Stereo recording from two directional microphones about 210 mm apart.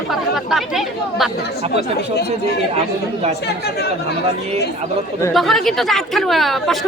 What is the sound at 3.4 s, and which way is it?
Speech, 50° left (ahead or behind).